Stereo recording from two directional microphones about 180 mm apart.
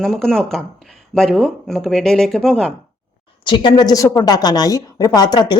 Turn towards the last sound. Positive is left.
turn(degrees=25)  # may be behind; listen again after turning